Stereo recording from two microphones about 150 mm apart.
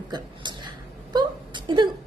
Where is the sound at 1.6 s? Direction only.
30° right (ahead or behind).